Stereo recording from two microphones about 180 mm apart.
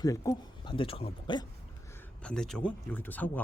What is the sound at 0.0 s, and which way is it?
Speech, 20° left (ahead or behind).